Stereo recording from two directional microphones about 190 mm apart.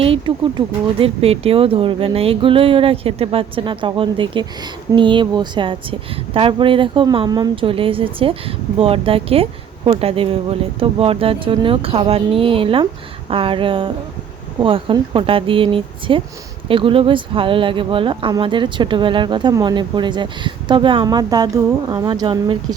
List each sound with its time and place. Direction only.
0.0 s a woman's voice: 25° right (ahead or behind)